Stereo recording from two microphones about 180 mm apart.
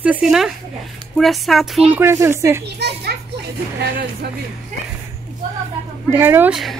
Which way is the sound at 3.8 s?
65° right (ahead or behind).